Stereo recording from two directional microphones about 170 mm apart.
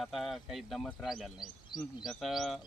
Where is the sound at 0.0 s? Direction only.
Centre (ahead or behind).